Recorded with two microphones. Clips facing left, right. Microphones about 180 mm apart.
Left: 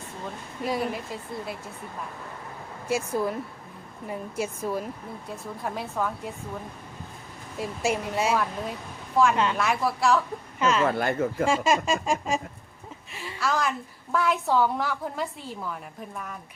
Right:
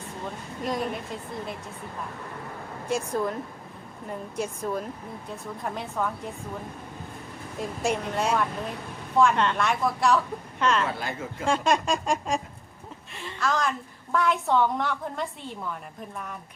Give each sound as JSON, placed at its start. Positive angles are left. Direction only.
{"t": 0.6, "sound": "a woman's voice", "side_deg": 5}
{"t": 2.9, "sound": "a woman's voice", "side_deg": 5}
{"t": 7.6, "sound": "a woman's voice", "side_deg": 5}
{"t": 10.8, "sound": "speech", "side_deg": 55}
{"t": 11.4, "sound": "a woman's voice", "side_deg": 5}